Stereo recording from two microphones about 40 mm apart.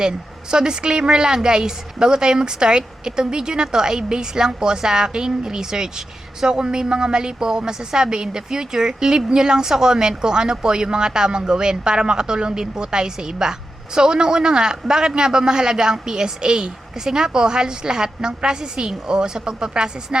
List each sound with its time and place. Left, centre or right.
0.5 s a woman's voice: right